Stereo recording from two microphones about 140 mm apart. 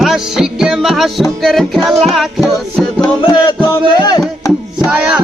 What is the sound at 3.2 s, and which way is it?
Music, 35° left (ahead or behind).